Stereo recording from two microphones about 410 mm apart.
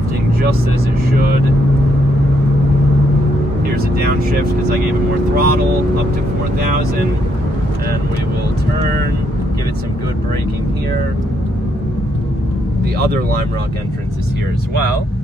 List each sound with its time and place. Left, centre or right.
5.3 s speech: right